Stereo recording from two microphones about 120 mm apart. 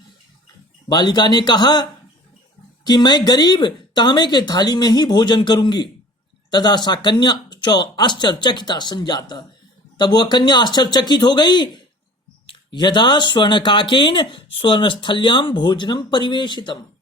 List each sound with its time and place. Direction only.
0.9 s speech: 35° left (ahead or behind)